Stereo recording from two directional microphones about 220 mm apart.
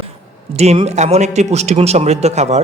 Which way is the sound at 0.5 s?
30° right (ahead or behind).